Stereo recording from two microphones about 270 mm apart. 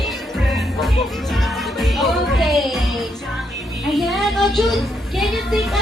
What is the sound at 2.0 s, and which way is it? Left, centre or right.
Music, centre.